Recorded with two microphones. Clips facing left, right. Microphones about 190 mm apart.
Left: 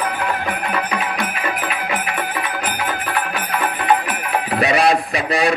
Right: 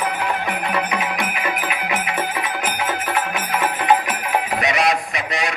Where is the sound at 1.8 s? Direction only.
20° right (ahead or behind).